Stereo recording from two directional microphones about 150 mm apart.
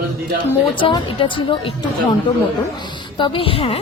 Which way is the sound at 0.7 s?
35° left (ahead or behind).